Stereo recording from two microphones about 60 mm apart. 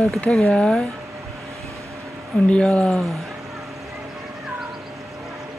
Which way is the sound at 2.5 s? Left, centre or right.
Centre.